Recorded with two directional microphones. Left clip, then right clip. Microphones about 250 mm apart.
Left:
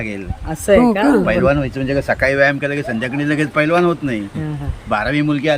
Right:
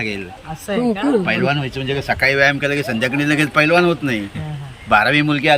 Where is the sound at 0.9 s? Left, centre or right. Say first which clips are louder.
Left 4 dB; left.